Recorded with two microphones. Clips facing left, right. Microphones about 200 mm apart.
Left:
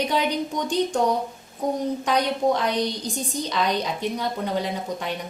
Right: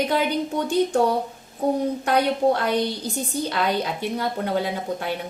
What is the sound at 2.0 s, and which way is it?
A woman's voice, 5° right (ahead or behind).